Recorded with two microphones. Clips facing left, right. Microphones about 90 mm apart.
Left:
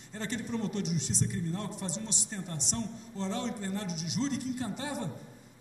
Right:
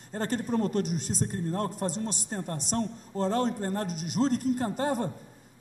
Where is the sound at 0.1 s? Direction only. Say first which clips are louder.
Right 6 dB; 45° right (ahead or behind).